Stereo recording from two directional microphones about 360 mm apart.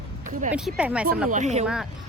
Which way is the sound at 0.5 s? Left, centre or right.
Centre.